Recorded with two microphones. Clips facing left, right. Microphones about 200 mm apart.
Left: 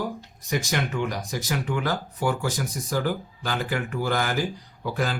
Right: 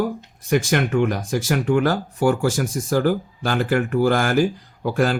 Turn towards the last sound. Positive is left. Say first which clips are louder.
# right 7 dB
turn(degrees=-45)  # may be behind; listen again after turning